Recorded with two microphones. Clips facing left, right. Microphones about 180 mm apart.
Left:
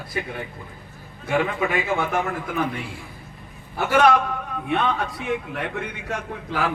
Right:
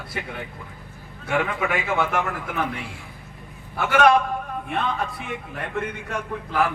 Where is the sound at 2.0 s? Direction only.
70° right (ahead or behind).